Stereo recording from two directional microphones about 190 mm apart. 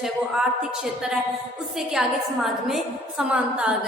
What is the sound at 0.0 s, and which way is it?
A woman's voice, 5° right (ahead or behind).